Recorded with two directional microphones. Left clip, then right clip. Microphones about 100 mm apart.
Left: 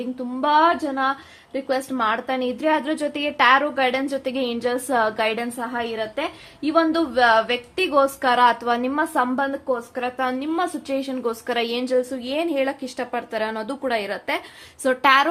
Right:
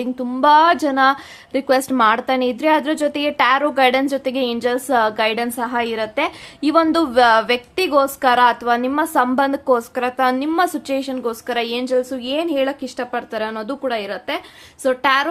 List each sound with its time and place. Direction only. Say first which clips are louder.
0.0 s a woman's voice: right 7 dB; 45° right (ahead or behind); by 1.1 s 70° right (ahead or behind)
1.5 s a woman's voice: right 7 dB; 85° right; by 5.5 s 25° right (ahead or behind)
5.5 s a woman's voice: right 5 dB; 40° right (ahead or behind)
8.2 s a woman's voice: right 3 dB; 25° right (ahead or behind)
9.3 s a woman's voice: right 7 dB; 65° right (ahead or behind)
9.9 s a woman's voice: right 6 dB; 45° right (ahead or behind)
10.9 s a woman's voice: right 3 dB; 20° right (ahead or behind)
14.8 s a woman's voice: even; centre (ahead or behind)